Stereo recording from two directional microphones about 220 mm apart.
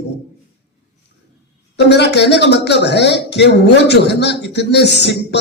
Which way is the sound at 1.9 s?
50° left (ahead or behind).